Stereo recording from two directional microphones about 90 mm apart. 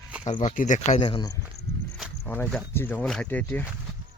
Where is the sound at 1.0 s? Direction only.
90° left.